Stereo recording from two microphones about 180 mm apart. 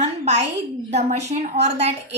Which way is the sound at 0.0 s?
40° right (ahead or behind).